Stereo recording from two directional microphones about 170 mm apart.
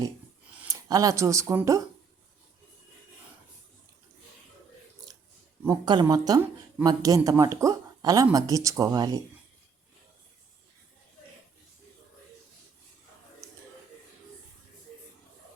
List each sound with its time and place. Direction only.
0.6 s speech: 20° right (ahead or behind)
5.6 s speech: 25° right (ahead or behind)